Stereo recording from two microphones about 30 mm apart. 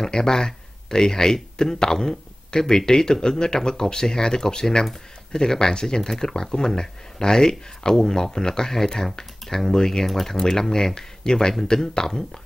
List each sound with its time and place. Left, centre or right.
0.0 s speech: centre
10.4 s speech: left